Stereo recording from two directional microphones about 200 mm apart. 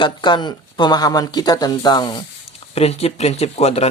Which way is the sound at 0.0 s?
20° left (ahead or behind).